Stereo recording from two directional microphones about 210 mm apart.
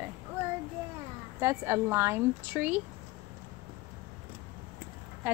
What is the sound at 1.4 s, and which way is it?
Speech, 15° right (ahead or behind).